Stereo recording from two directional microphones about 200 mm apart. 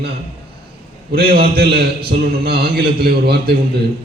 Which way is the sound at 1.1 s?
50° right (ahead or behind).